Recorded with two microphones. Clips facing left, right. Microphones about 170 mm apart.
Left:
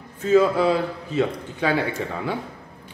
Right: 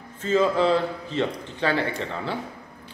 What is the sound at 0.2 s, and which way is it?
A man's voice, 10° left (ahead or behind).